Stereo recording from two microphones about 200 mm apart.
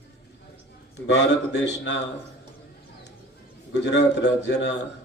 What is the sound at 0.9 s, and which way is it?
A man's voice, 60° left (ahead or behind).